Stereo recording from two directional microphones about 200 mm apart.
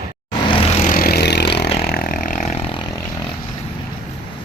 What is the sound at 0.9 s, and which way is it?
Vehicle, 45° left (ahead or behind).